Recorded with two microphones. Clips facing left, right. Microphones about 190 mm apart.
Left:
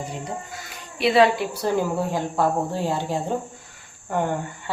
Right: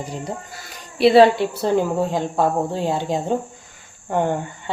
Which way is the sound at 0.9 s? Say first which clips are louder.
Right 6 dB; 35° right (ahead or behind).